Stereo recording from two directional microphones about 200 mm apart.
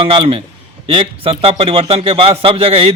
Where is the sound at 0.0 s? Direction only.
25° right (ahead or behind).